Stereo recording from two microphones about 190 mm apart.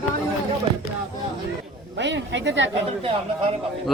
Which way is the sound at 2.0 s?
70° right (ahead or behind).